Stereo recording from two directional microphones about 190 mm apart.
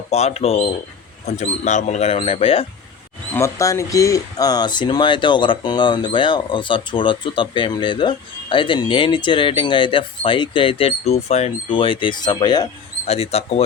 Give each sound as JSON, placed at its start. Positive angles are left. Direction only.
{"t": 0.1, "sound": "speech", "side_deg": 35}
{"t": 3.3, "sound": "speech", "side_deg": 15}
{"t": 13.1, "sound": "speech", "side_deg": 35}